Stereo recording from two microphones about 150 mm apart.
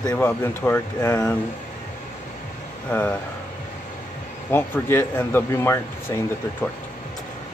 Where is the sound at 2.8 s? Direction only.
10° left (ahead or behind).